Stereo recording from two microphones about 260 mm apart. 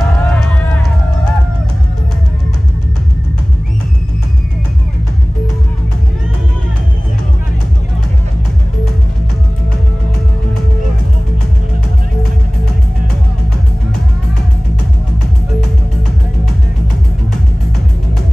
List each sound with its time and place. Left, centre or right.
0.0 s run: centre